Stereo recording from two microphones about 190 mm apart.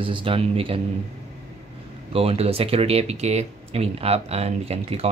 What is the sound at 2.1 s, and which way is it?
Speech, 30° right (ahead or behind).